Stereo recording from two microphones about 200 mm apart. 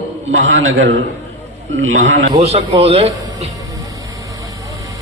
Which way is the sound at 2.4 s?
30° right (ahead or behind).